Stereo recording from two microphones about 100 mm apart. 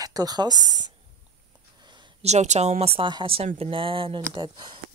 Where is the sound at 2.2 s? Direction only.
85° right.